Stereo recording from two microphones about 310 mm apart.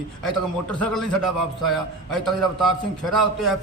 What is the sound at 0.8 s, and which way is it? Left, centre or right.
A man's voice, centre.